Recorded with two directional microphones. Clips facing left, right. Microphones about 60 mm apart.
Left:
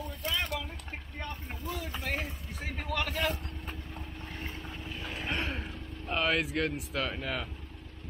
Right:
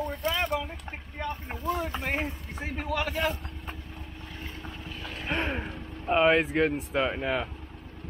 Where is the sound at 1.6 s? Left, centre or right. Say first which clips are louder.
Right 9 dB; right.